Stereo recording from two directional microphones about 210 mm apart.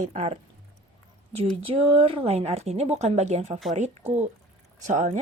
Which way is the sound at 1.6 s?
25° right (ahead or behind).